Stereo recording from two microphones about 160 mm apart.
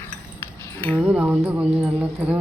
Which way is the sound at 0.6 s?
10° left (ahead or behind).